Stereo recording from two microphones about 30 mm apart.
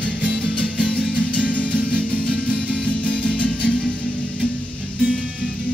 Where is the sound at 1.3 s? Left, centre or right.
Left.